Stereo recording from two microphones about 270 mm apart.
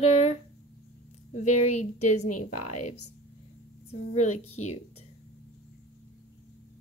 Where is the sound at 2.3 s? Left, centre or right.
Left.